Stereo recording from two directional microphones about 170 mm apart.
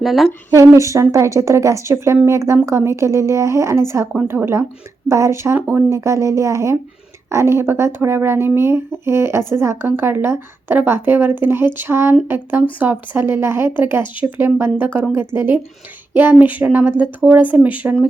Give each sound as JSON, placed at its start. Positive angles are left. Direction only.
{"t": 0.0, "sound": "speech", "side_deg": 0}
{"t": 0.5, "sound": "speech", "side_deg": -20}